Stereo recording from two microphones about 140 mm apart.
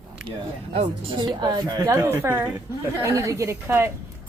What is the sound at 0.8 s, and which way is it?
A woman's voice, 35° right (ahead or behind).